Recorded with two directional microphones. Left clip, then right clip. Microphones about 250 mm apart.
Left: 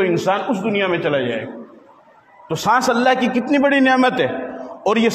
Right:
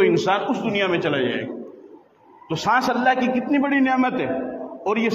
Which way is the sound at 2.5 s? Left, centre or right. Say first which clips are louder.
Left 4 dB; left.